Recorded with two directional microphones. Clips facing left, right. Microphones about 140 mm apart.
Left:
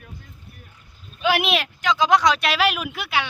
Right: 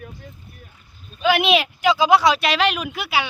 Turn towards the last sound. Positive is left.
turn(degrees=-5)  # may be behind; listen again after turning